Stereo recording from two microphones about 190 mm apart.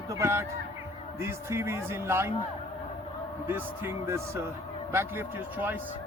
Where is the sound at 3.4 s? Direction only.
10° right (ahead or behind).